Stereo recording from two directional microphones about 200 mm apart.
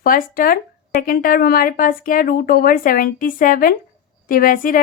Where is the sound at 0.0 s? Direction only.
45° left (ahead or behind).